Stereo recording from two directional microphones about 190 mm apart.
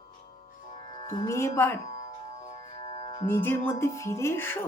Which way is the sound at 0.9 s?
20° left (ahead or behind).